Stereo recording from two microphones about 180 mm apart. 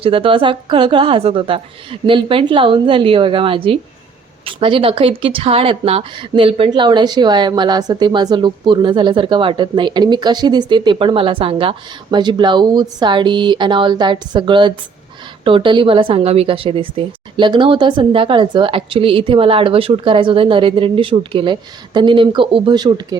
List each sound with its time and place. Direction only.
0.0 s a woman's voice: 30° right (ahead or behind)